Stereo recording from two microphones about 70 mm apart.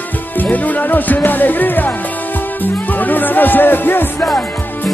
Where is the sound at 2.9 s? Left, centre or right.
Left.